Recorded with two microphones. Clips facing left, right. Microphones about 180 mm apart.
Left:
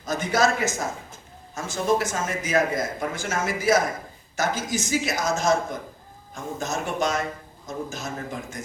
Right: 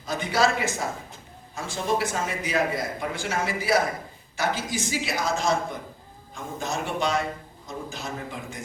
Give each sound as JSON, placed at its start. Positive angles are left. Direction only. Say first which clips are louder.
{"t": 0.0, "sound": "a man's voice", "louder": "left 1 dB", "side_deg": 45}